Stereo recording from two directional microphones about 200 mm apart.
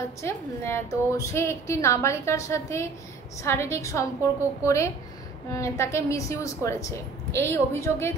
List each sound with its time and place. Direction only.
0.2 s a woman's voice: 15° left (ahead or behind)